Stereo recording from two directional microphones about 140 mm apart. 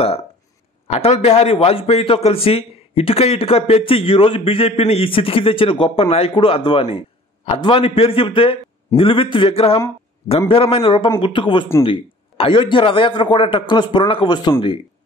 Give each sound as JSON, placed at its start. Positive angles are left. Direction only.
{"t": 0.8, "sound": "a man's voice", "side_deg": 50}